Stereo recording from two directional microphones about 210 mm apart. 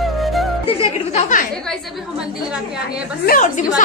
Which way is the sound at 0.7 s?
30° left (ahead or behind).